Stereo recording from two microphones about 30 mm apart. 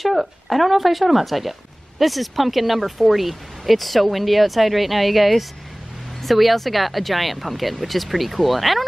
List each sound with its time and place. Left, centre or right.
0.0 s speech: centre